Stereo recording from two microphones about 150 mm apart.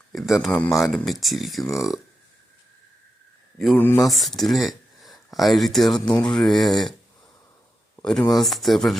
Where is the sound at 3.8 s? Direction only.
15° left (ahead or behind).